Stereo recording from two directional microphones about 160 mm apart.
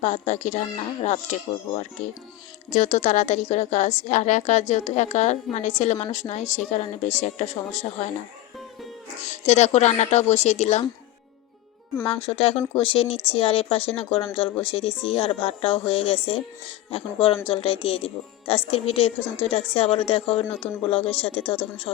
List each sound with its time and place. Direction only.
0.0 s a woman's voice: 45° left (ahead or behind)
9.3 s a woman's voice: 45° left (ahead or behind)
12.0 s speech: 35° left (ahead or behind)